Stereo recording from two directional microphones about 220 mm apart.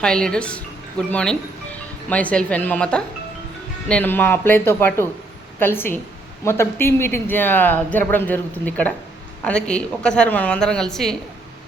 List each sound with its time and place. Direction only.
0.0 s a woman's voice: 5° left (ahead or behind)